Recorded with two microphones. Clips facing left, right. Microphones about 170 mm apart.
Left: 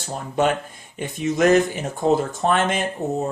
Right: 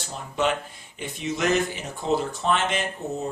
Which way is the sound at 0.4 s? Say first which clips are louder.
Left 4 dB; 50° left (ahead or behind).